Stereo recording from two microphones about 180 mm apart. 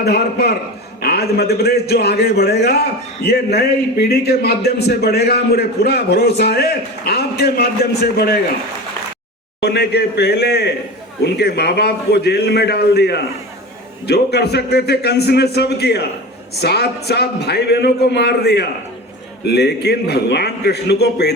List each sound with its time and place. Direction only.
0.0 s a man's voice: 60° left (ahead or behind)
9.6 s a man's voice: 65° left (ahead or behind)